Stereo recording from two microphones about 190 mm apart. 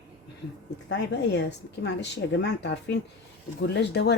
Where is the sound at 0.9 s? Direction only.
65° left (ahead or behind).